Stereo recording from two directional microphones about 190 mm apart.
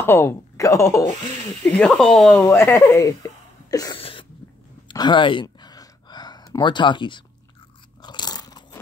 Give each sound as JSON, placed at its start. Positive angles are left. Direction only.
{"t": 0.0, "sound": "speech", "side_deg": 10}
{"t": 1.8, "sound": "speech", "side_deg": 5}
{"t": 2.3, "sound": "speech", "side_deg": 15}
{"t": 3.7, "sound": "a sound", "side_deg": 20}
{"t": 4.0, "sound": "sneeze", "side_deg": 30}
{"t": 4.8, "sound": "a sound", "side_deg": 25}
{"t": 8.0, "sound": "crunch", "side_deg": 20}